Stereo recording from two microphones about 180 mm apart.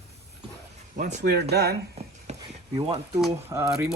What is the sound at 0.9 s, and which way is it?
Speech, 55° right (ahead or behind).